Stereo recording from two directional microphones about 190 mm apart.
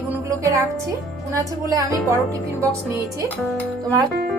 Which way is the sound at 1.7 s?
15° right (ahead or behind).